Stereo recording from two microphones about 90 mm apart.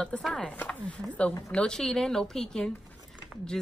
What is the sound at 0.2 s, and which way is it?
Speech, 10° left (ahead or behind).